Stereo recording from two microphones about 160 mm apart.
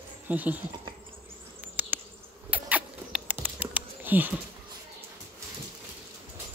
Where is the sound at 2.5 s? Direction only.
10° right (ahead or behind).